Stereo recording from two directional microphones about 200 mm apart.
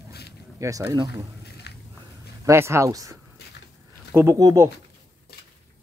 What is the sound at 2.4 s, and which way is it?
Speech, 15° right (ahead or behind).